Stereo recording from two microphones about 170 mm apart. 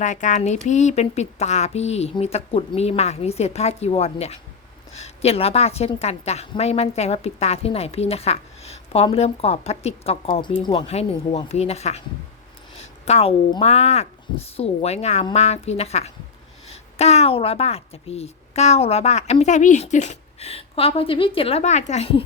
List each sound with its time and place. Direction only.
0.0 s a woman's voice: 45° left (ahead or behind)
12.7 s a sound: 40° left (ahead or behind)
13.5 s a woman's voice: 35° left (ahead or behind)